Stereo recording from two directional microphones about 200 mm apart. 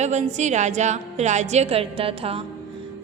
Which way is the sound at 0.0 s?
35° right (ahead or behind).